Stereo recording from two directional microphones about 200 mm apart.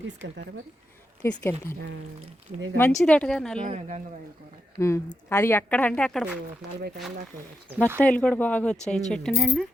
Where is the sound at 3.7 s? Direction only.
35° right (ahead or behind).